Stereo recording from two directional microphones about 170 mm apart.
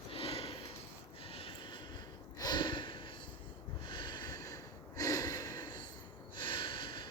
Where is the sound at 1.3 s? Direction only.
35° left (ahead or behind).